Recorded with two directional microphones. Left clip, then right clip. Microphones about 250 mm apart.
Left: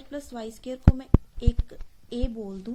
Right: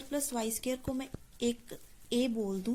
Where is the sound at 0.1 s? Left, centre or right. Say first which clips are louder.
Right 1 dB; right.